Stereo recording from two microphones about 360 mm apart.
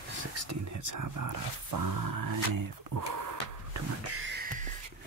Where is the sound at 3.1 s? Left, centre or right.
Right.